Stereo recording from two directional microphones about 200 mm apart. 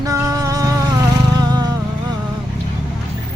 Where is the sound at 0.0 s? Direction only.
15° right (ahead or behind).